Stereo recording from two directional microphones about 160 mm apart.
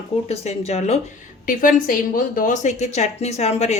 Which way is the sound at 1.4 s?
60° left (ahead or behind).